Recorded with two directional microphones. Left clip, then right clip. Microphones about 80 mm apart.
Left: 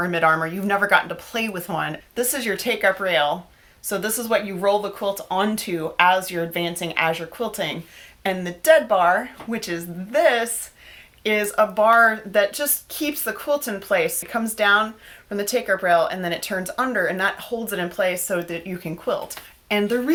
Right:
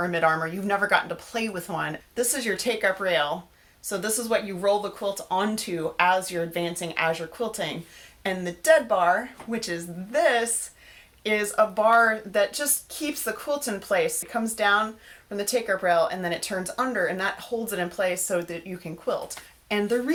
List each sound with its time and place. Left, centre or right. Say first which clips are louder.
0.0 s speech: left 4 dB; left
11.2 s speech: left 3 dB; left